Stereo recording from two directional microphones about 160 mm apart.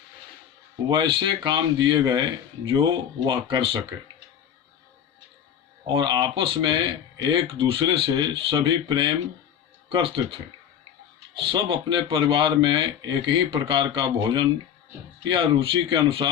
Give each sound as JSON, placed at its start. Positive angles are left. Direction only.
{"t": 0.9, "sound": "speech", "side_deg": -30}
{"t": 5.8, "sound": "speech", "side_deg": -30}
{"t": 11.3, "sound": "speech", "side_deg": -30}